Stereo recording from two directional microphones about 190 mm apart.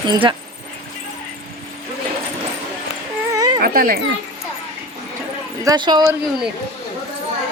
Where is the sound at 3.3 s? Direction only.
20° right (ahead or behind).